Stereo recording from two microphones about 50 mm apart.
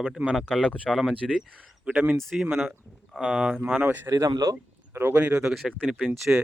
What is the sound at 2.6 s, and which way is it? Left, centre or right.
Speech, centre.